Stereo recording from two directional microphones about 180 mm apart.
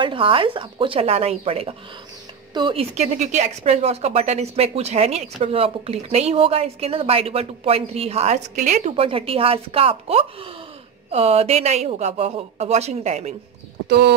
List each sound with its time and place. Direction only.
0.0 s speech: 30° right (ahead or behind)
13.8 s speech: 60° right (ahead or behind)